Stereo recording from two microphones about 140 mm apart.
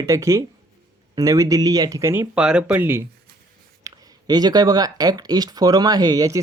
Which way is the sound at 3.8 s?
30° right (ahead or behind).